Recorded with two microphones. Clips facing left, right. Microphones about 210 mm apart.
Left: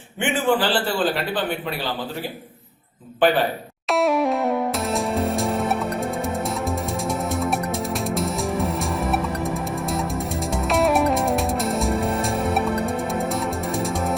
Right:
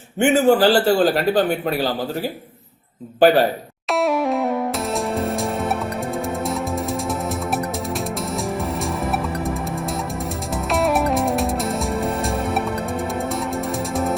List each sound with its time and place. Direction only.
0.2 s a man's voice: 40° right (ahead or behind)
3.2 s a man's voice: 40° right (ahead or behind)
3.9 s music: centre (ahead or behind)
8.1 s music: centre (ahead or behind)
10.7 s music: centre (ahead or behind)